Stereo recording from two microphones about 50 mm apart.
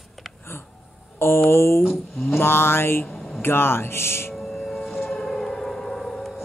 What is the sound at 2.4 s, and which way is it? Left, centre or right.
Mantra, left.